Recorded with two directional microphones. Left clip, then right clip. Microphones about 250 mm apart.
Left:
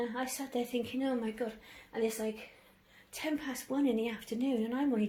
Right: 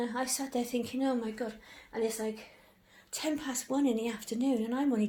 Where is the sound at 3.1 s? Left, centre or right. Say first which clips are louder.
Right 2 dB; right.